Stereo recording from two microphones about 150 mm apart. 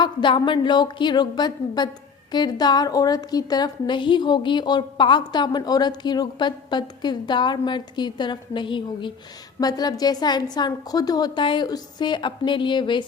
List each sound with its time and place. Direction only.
0.0 s a woman's voice: 30° left (ahead or behind)